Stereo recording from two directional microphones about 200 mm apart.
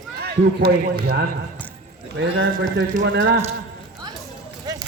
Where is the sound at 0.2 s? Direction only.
50° right (ahead or behind).